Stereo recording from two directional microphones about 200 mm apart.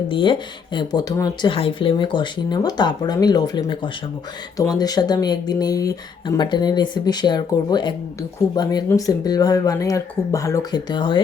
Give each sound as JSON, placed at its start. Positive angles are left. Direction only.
{"t": 0.1, "sound": "speech", "side_deg": 25}